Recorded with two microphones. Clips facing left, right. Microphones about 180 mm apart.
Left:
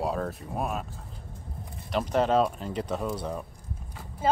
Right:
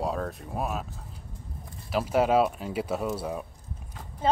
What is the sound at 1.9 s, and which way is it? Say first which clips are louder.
Speech: right 1 dB; 5° right (ahead or behind).